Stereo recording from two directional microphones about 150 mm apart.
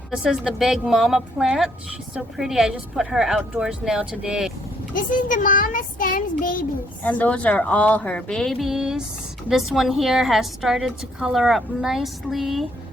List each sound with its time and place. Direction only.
0.1 s a woman's voice: 5° right (ahead or behind)
4.9 s a child's voice: 65° left (ahead or behind)
7.0 s a woman's voice: 10° left (ahead or behind)